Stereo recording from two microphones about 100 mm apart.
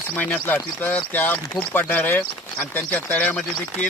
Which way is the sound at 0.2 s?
20° left (ahead or behind).